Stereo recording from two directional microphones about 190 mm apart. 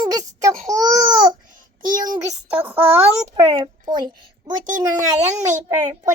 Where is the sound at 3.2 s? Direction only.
35° right (ahead or behind).